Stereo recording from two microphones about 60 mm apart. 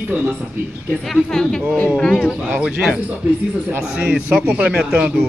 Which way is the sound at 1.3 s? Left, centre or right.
Centre.